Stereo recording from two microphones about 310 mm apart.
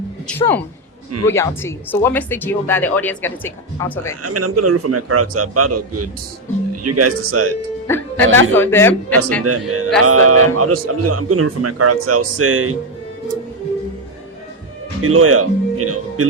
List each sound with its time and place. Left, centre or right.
0.3 s speech: centre
4.2 s speech: right
7.9 s speech: centre
9.4 s speech: right
15.0 s speech: right